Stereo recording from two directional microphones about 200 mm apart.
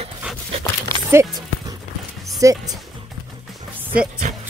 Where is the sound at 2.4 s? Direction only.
15° right (ahead or behind).